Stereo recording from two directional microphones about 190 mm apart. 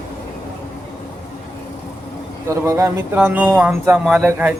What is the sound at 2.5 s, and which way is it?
Speech, 15° right (ahead or behind).